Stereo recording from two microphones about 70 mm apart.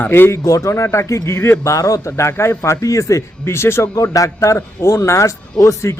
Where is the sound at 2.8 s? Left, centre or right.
Left.